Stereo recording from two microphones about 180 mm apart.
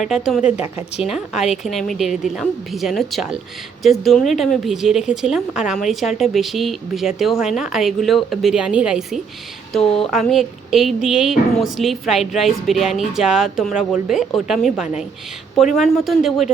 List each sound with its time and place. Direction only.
0.0 s speech: centre (ahead or behind)
0.8 s a woman's voice: 35° left (ahead or behind)
1.1 s speech: centre (ahead or behind)